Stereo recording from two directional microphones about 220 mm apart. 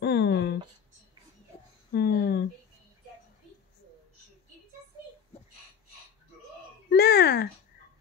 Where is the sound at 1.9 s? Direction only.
45° left (ahead or behind).